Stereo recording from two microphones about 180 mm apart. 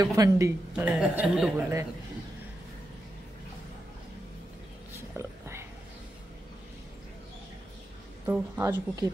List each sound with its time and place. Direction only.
0.0 s speech: 20° right (ahead or behind)
0.7 s a woman's voice: 5° right (ahead or behind)
5.1 s a sound: 15° right (ahead or behind)
8.3 s speech: 10° right (ahead or behind)